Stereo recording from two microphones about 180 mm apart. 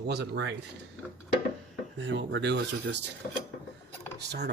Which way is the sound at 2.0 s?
90° right.